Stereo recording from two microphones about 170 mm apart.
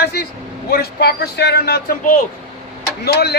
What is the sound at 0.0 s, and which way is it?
A man's voice, 65° left (ahead or behind).